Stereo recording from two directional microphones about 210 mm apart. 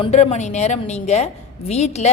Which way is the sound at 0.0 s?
30° left (ahead or behind).